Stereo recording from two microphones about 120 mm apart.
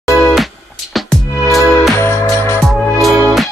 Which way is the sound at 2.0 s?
20° left (ahead or behind).